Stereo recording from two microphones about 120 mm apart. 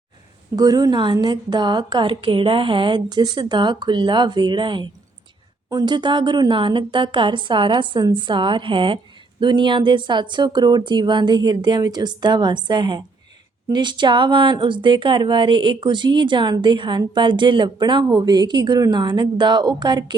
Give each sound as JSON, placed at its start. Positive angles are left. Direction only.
{"t": 0.5, "sound": "a woman's voice", "side_deg": -30}